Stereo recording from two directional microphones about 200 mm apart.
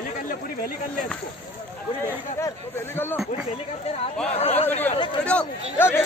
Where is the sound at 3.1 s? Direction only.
Centre (ahead or behind).